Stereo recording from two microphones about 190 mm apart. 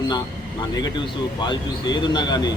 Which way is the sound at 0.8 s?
25° left (ahead or behind).